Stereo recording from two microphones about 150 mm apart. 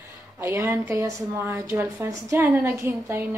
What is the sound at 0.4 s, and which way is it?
Speech, 15° right (ahead or behind).